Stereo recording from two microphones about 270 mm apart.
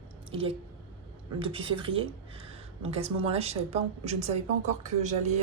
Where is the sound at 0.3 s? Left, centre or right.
Right.